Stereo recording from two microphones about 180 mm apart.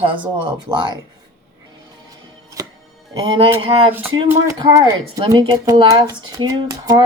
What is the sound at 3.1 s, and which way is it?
Speech, 30° right (ahead or behind).